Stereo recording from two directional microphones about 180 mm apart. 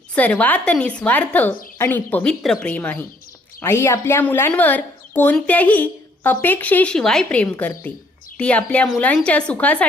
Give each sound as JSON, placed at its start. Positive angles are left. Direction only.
{"t": 0.1, "sound": "speech", "side_deg": 10}